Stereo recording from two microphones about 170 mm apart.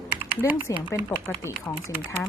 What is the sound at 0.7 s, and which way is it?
Speech, 20° left (ahead or behind).